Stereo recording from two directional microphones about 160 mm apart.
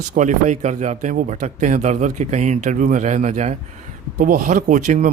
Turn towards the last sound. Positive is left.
turn(degrees=-55)  # may be behind; listen again after turning